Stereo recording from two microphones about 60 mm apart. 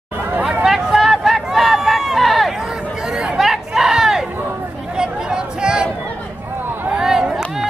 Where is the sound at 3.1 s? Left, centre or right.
Centre.